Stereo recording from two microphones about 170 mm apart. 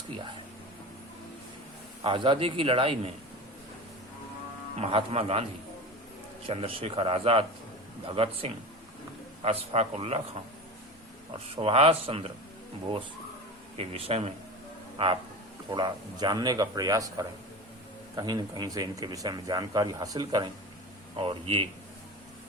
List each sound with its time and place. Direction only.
2.0 s a man's voice: 30° right (ahead or behind)
4.8 s a man's voice: 35° right (ahead or behind)
6.5 s a man's voice: 35° right (ahead or behind)
11.5 s a man's voice: 35° right (ahead or behind)
13.7 s a man's voice: 35° right (ahead or behind)